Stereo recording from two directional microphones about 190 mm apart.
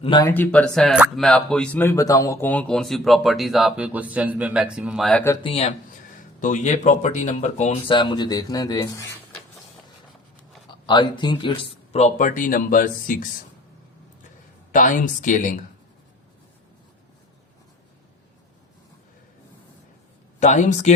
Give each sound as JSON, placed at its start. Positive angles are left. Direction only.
{"t": 0.0, "sound": "a man's voice", "side_deg": 20}
{"t": 5.4, "sound": "speech", "side_deg": 30}
{"t": 7.9, "sound": "speech", "side_deg": 25}
{"t": 10.7, "sound": "speech", "side_deg": 25}
{"t": 14.7, "sound": "speech", "side_deg": 45}
{"t": 20.4, "sound": "speech", "side_deg": 40}